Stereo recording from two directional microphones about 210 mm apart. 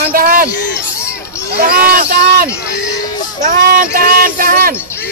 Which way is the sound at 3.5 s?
45° right (ahead or behind).